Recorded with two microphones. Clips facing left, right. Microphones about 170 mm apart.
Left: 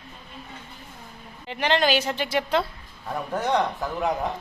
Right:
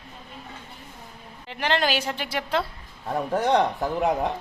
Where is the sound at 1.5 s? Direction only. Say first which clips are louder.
Left 2 dB; 5° right (ahead or behind).